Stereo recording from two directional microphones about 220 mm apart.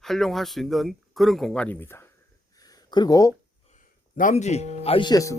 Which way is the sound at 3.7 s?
35° left (ahead or behind).